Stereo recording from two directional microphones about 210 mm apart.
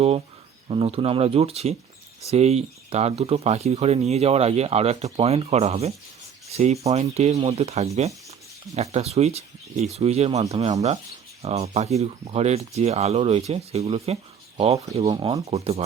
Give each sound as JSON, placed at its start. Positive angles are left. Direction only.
{"t": 0.7, "sound": "speech", "side_deg": -25}
{"t": 6.5, "sound": "rub", "side_deg": -30}
{"t": 6.8, "sound": "speech", "side_deg": -30}
{"t": 15.4, "sound": "speech", "side_deg": -30}